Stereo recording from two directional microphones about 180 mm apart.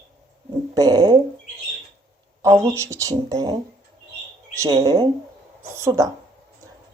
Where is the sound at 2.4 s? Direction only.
15° right (ahead or behind).